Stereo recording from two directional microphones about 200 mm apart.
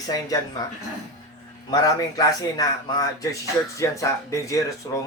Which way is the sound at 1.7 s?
20° left (ahead or behind).